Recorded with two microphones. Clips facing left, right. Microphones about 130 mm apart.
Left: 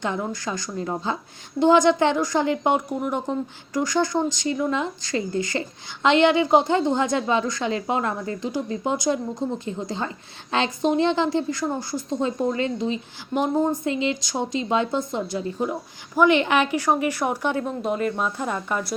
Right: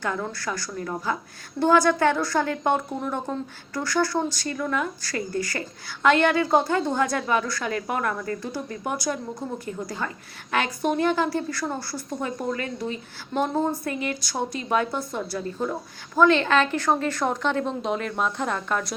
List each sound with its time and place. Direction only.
0.0 s a woman's voice: 20° left (ahead or behind); by 18.9 s 5° left (ahead or behind)